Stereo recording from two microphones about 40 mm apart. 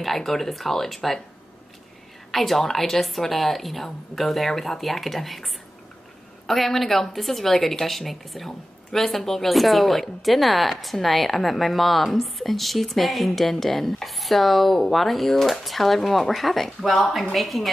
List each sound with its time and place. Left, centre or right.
0.0 s speech: centre
2.3 s speech: centre